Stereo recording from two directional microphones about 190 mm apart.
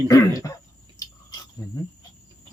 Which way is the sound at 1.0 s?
20° left (ahead or behind).